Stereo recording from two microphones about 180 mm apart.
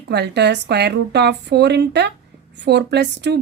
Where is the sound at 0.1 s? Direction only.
70° right (ahead or behind).